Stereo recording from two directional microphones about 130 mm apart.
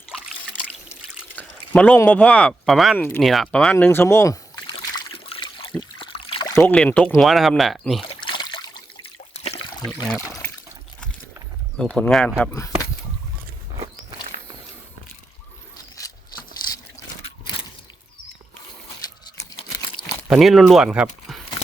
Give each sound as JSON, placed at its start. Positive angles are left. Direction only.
{"t": 1.4, "sound": "speech", "side_deg": 10}
{"t": 4.6, "sound": "trickle", "side_deg": 40}
{"t": 6.0, "sound": "a sound", "side_deg": 45}
{"t": 6.7, "sound": "speech", "side_deg": 10}
{"t": 8.2, "sound": "trickle", "side_deg": 35}
{"t": 9.4, "sound": "water", "side_deg": 50}
{"t": 11.8, "sound": "speech", "side_deg": 5}
{"t": 13.7, "sound": "music", "side_deg": -50}
{"t": 20.0, "sound": "a sound", "side_deg": 40}
{"t": 20.4, "sound": "speech", "side_deg": 0}
{"t": 21.3, "sound": "a sound", "side_deg": 0}